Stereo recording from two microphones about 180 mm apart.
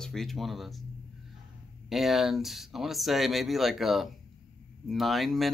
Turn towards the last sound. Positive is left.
turn(degrees=0)  # may be behind; listen again after turning